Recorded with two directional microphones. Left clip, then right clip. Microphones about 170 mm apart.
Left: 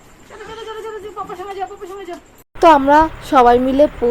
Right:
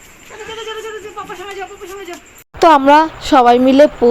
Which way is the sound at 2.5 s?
35° right (ahead or behind).